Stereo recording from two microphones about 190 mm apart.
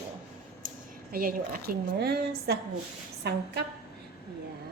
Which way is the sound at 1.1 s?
50° right (ahead or behind).